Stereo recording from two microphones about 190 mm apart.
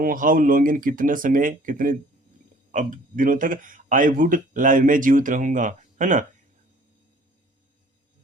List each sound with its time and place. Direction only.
0.0 s speech: 45° right (ahead or behind)